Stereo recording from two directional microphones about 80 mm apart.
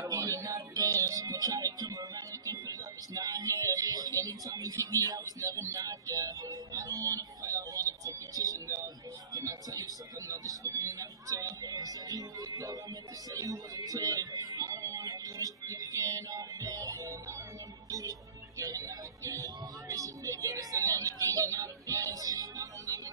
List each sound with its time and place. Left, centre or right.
0.0 s music: right